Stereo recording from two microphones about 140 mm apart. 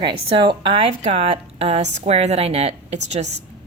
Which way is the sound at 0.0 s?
35° right (ahead or behind).